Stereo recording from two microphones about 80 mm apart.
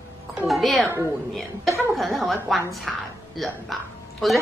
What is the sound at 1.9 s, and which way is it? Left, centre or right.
A woman's voice, centre.